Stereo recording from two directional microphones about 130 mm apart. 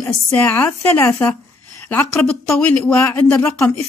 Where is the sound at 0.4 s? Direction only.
15° left (ahead or behind).